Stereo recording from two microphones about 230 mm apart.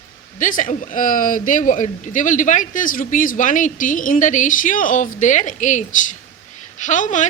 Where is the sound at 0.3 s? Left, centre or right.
Left.